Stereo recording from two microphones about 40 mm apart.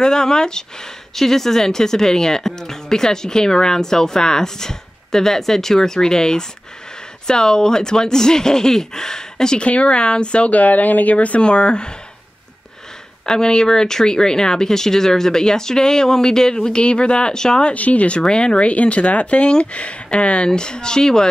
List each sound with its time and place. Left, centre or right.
0.0 s speech: centre
9.6 s speech: left
10.5 s speech: left
11.1 s speech: left
13.2 s speech: centre
17.7 s speech: left
18.2 s speech: left